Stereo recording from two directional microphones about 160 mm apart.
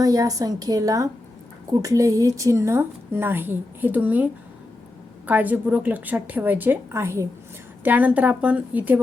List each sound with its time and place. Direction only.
0.0 s a woman's voice: 20° right (ahead or behind)